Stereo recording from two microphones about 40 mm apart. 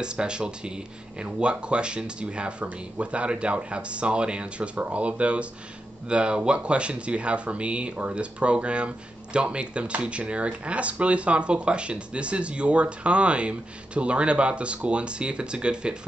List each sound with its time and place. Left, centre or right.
0.0 s speech: right